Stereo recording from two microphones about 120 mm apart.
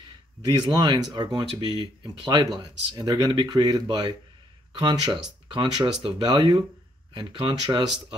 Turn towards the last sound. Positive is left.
turn(degrees=-40)  # may be behind; listen again after turning